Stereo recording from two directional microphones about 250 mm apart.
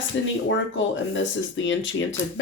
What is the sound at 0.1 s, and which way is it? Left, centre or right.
Speech, left.